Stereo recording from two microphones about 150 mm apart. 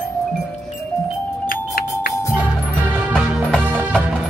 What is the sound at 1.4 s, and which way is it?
Music, 85° left.